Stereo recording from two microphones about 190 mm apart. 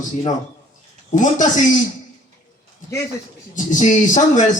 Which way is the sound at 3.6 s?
40° left (ahead or behind).